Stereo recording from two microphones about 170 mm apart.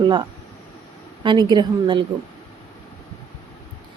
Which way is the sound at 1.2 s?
25° right (ahead or behind).